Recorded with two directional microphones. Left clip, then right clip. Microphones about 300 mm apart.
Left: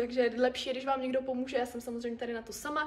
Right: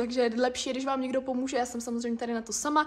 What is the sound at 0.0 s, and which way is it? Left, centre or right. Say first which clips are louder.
A woman's voice: right 2 dB; right.